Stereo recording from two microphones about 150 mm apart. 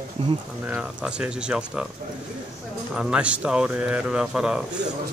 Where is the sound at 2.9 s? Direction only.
5° right (ahead or behind).